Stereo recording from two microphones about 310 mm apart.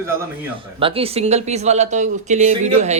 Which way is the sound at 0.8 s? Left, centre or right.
Centre.